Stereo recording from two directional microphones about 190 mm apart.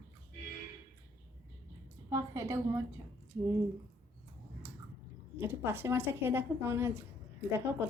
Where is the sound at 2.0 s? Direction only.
15° right (ahead or behind).